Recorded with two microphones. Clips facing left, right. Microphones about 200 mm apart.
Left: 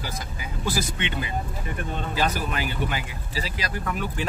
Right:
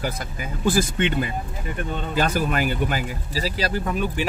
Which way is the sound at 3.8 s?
20° right (ahead or behind).